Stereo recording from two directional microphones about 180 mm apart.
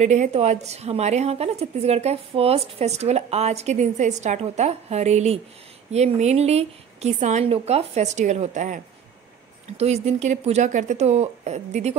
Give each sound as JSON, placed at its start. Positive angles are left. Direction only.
{"t": 0.0, "sound": "a woman's voice", "side_deg": -40}